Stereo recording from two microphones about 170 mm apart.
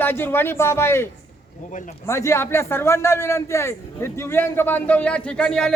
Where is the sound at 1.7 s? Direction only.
50° left (ahead or behind).